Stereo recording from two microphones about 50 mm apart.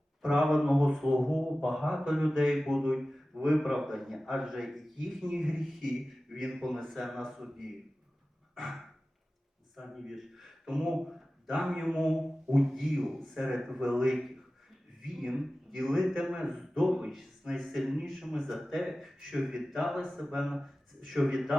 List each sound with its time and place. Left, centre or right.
0.2 s a man's voice: centre
8.5 s dog: centre
9.7 s a man's voice: centre